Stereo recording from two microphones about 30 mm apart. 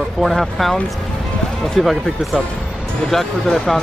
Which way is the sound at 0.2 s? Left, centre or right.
Centre.